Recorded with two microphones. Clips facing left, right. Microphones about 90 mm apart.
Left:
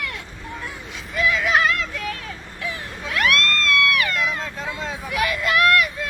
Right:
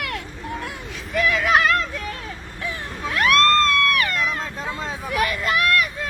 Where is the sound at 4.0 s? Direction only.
40° right (ahead or behind).